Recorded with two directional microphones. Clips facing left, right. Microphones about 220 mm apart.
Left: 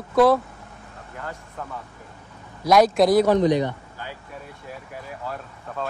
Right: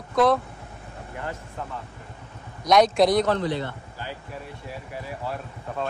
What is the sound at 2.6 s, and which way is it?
Speech, 5° left (ahead or behind).